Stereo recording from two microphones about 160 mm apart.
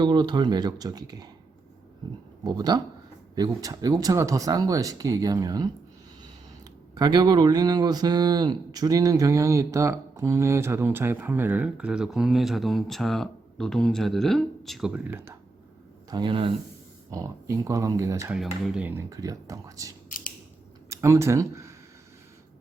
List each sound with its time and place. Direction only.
0.0 s speech: 30° right (ahead or behind)
2.4 s speech: 25° right (ahead or behind)
6.9 s speech: 25° right (ahead or behind)
16.0 s speech: 30° right (ahead or behind)
17.1 s speech: 20° right (ahead or behind)
18.3 s speech: 5° right (ahead or behind); by 19.9 s 20° right (ahead or behind)
20.1 s scissors: 60° left (ahead or behind)
20.9 s speech: 15° right (ahead or behind)